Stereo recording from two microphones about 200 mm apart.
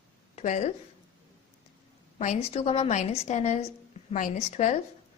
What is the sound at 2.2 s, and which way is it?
Speech, 35° left (ahead or behind).